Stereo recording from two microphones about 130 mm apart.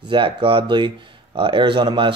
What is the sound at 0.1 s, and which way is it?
Speech, 40° right (ahead or behind).